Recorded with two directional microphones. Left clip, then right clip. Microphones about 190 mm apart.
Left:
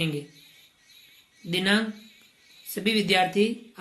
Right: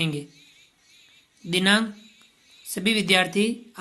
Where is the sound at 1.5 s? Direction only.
40° right (ahead or behind).